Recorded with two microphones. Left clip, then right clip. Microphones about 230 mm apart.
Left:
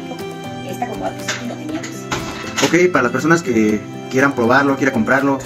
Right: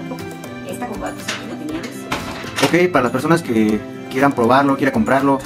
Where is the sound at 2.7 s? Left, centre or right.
Centre.